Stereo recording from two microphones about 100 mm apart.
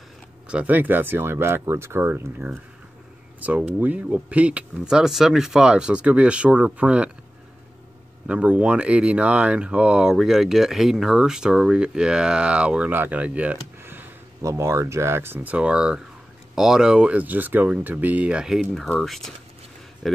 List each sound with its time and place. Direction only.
0.5 s speech: 15° right (ahead or behind)
8.3 s speech: 10° right (ahead or behind)
14.4 s speech: 30° right (ahead or behind); by 20.2 s centre (ahead or behind)